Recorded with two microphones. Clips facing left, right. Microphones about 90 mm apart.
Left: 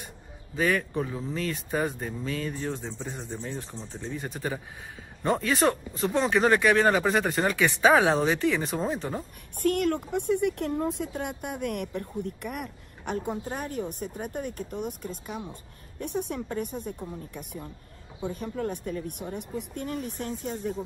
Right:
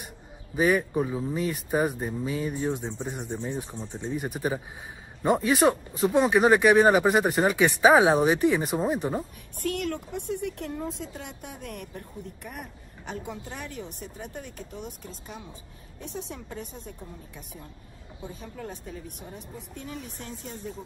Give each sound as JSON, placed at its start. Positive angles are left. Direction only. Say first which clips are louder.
{"t": 0.6, "sound": "speech", "louder": "right 3 dB", "side_deg": -15}
{"t": 9.6, "sound": "speech", "louder": "left 5 dB", "side_deg": 50}